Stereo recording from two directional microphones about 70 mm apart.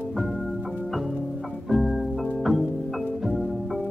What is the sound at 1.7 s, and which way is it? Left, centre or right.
Music, centre.